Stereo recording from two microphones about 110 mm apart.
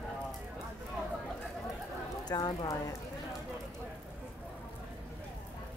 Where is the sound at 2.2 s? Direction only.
40° left (ahead or behind).